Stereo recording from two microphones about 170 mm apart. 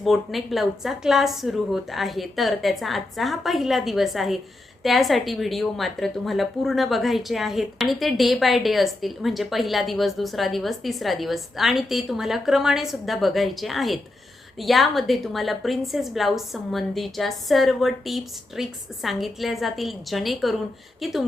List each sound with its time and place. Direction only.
0.0 s a woman's voice: centre (ahead or behind)